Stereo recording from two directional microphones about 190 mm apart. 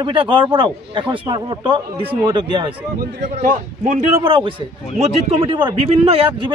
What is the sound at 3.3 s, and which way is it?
Speech, 40° right (ahead or behind).